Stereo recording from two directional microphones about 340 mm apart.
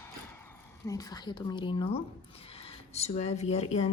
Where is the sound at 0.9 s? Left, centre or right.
Centre.